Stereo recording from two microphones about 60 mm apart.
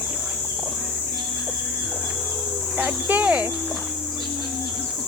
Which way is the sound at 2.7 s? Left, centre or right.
Right.